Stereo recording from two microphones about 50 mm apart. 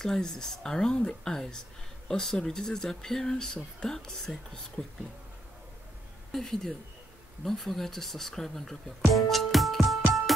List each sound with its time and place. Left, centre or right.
0.0 s speech: centre
6.3 s speech: centre